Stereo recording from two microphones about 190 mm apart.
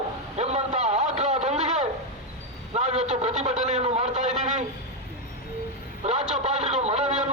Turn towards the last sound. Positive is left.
turn(degrees=-35)  # may be behind; listen again after turning